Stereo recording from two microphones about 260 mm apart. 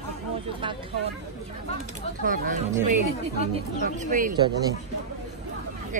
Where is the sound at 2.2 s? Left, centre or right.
Right.